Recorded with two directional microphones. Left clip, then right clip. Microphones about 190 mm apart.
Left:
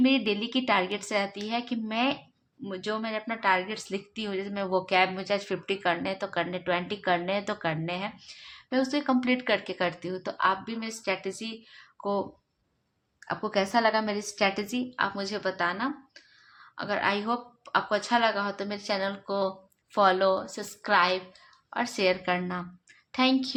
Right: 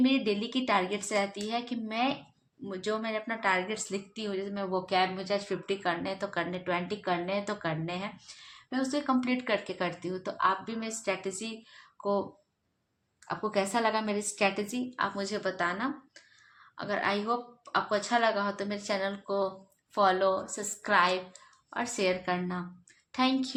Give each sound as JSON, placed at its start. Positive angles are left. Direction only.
{"t": 0.3, "sound": "a woman's voice", "side_deg": 25}
{"t": 4.1, "sound": "a woman's voice", "side_deg": 30}
{"t": 13.2, "sound": "a woman's voice", "side_deg": 35}